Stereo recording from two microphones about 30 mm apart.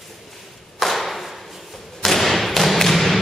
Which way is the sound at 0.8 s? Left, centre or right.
Centre.